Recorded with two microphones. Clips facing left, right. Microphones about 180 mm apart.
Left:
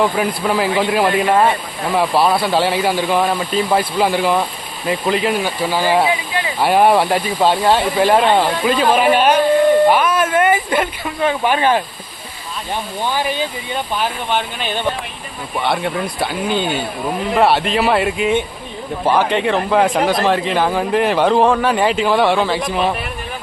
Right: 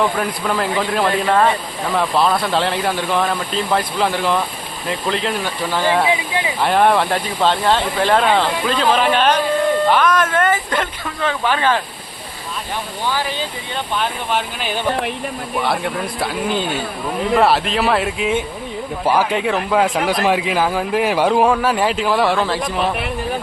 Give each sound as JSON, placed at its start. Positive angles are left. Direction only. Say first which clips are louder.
{"t": 0.2, "sound": "speech", "louder": "left 3 dB", "side_deg": 5}
{"t": 13.1, "sound": "speech", "louder": "left 2 dB", "side_deg": 15}
{"t": 13.9, "sound": "speech", "louder": "even", "side_deg": 0}